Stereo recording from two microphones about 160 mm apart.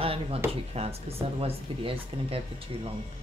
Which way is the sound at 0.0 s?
35° right (ahead or behind).